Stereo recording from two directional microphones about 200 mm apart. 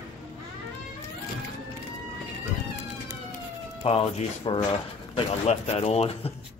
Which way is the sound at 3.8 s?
25° left (ahead or behind).